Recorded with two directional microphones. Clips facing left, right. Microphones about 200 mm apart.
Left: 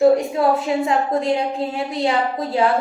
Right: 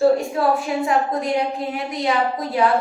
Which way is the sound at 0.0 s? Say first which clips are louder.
Left 2 dB; 20° left (ahead or behind).